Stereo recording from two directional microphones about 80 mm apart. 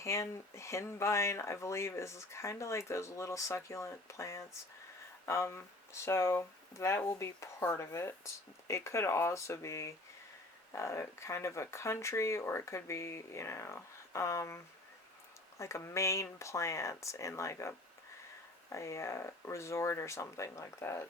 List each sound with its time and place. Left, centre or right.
0.0 s speech: left